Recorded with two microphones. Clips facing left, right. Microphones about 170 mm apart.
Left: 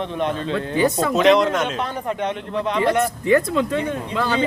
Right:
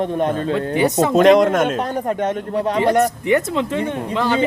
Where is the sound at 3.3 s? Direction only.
20° right (ahead or behind).